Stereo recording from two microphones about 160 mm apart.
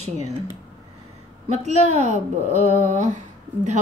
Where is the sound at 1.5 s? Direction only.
45° right (ahead or behind).